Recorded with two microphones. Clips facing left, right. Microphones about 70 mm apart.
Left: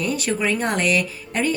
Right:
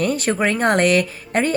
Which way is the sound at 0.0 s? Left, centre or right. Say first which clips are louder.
Right 4 dB; right.